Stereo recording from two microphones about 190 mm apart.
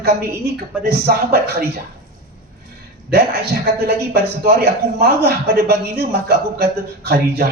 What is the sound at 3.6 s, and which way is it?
A woman's voice, 55° right (ahead or behind).